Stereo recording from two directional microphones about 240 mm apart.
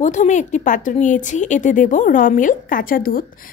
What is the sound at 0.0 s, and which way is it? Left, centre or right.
Speech, left.